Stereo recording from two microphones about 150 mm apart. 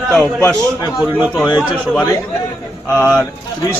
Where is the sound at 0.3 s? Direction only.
10° left (ahead or behind).